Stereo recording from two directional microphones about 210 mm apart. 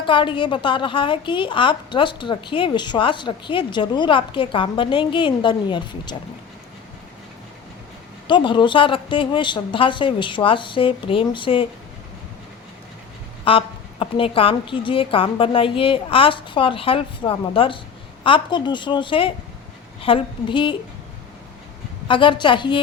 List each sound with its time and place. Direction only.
0.0 s a woman's voice: 25° left (ahead or behind)
8.3 s a woman's voice: 20° left (ahead or behind)
13.4 s a woman's voice: 25° left (ahead or behind)
22.0 s a woman's voice: 25° left (ahead or behind)